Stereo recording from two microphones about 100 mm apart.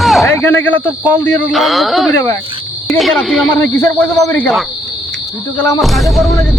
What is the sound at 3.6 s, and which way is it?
Speech, 25° left (ahead or behind).